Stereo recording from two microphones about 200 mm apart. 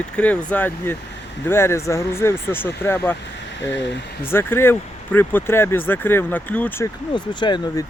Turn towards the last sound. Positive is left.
turn(degrees=20)  # may be behind; listen again after turning